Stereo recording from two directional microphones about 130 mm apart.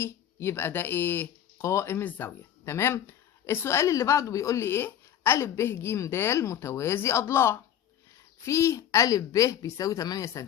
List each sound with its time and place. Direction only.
0.0 s speech: 20° left (ahead or behind)